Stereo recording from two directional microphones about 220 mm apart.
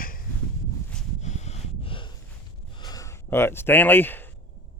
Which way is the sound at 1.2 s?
30° left (ahead or behind).